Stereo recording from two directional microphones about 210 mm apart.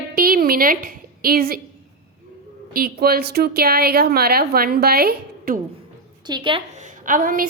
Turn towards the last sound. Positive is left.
turn(degrees=-40)  # may be behind; listen again after turning